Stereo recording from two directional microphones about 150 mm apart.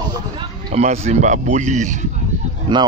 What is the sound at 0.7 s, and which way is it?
Speech, 45° right (ahead or behind).